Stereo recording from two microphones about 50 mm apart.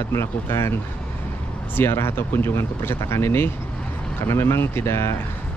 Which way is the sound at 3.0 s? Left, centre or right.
Left.